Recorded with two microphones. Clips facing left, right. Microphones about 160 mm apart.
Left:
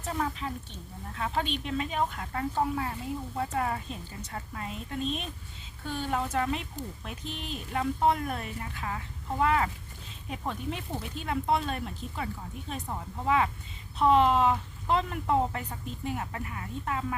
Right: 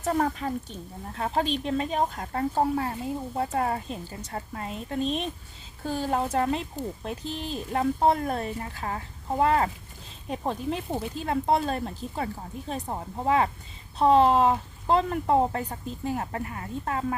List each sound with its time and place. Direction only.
0.0 s a woman's voice: 45° right (ahead or behind)